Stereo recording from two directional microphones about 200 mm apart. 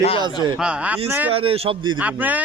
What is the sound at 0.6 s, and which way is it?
Speech, 5° right (ahead or behind).